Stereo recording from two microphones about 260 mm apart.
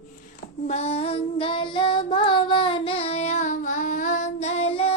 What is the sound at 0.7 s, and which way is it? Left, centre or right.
Child singing, left.